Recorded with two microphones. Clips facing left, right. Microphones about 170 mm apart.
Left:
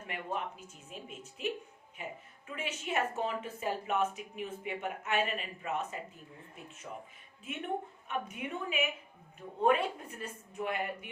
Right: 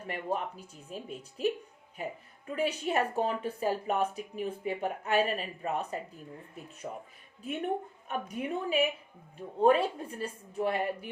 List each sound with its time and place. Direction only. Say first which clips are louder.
0.1 s a woman's voice: right 4 dB; 35° right (ahead or behind)
8.0 s a woman's voice: right 3 dB; 40° right (ahead or behind)